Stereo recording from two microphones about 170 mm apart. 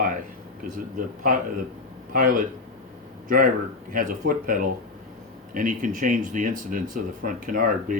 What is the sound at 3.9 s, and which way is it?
Speech, 55° right (ahead or behind).